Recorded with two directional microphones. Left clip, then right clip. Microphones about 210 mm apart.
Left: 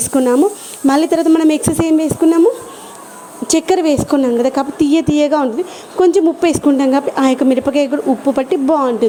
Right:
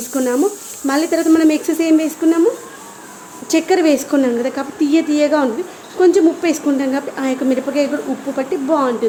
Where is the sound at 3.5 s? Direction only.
35° left (ahead or behind).